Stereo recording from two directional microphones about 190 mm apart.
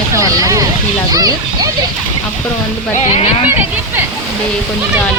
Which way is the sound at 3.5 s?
10° right (ahead or behind).